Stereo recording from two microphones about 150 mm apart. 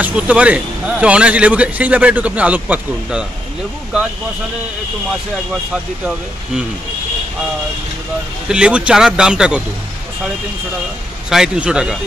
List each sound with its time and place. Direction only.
0.0 s a man's voice: 10° right (ahead or behind)
8.5 s speech: 5° right (ahead or behind)
11.2 s speech: 5° right (ahead or behind)